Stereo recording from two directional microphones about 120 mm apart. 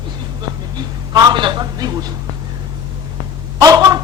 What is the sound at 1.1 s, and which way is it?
Speech, 35° right (ahead or behind).